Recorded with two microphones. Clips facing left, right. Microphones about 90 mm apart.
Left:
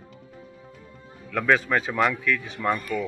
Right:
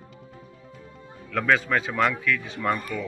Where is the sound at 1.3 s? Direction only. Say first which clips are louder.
Left 1 dB; 5° left (ahead or behind).